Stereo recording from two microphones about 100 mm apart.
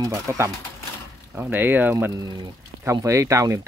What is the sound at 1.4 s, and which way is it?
Speech, 20° right (ahead or behind).